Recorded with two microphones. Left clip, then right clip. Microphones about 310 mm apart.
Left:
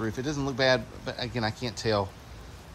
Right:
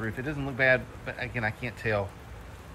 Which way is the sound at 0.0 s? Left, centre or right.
Centre.